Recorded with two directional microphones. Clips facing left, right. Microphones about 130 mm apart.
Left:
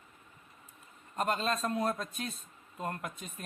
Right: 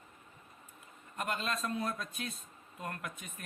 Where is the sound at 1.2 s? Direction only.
35° left (ahead or behind).